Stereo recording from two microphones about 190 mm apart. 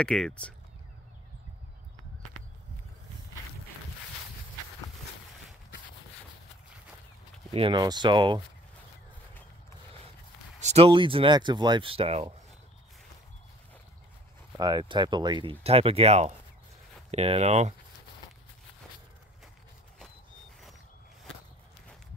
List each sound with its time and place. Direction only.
0.0 s speech: 5° left (ahead or behind)
7.5 s speech: 25° right (ahead or behind)
10.6 s speech: 35° right (ahead or behind)
14.6 s speech: 20° right (ahead or behind)